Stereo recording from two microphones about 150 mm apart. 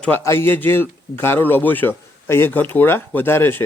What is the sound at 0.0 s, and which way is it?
Speech, 15° left (ahead or behind).